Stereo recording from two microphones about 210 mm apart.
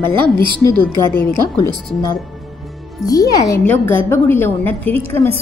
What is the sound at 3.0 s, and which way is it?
A woman's voice, 15° left (ahead or behind).